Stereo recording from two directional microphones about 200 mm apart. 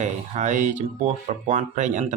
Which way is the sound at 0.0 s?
35° right (ahead or behind).